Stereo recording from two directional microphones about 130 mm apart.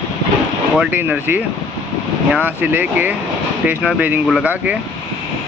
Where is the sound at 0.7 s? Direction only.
15° right (ahead or behind).